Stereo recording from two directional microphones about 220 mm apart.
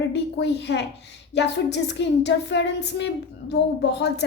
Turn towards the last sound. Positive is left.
turn(degrees=50)  # may be behind; listen again after turning